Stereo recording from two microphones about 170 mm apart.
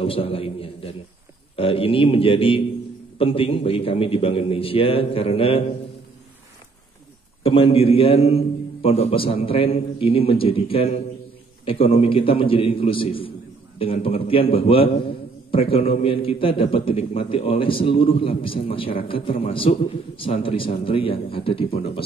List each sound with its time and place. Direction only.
0.0 s a man's voice: 35° left (ahead or behind)
7.4 s a man's voice: 35° left (ahead or behind)